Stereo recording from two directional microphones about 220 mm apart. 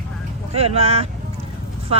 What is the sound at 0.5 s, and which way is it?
Speech, 30° right (ahead or behind).